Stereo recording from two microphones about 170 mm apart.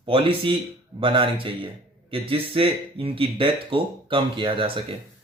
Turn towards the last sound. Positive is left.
turn(degrees=-30)  # may be behind; listen again after turning